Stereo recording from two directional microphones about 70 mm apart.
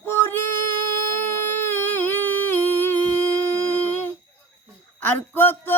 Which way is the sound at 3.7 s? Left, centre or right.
Left.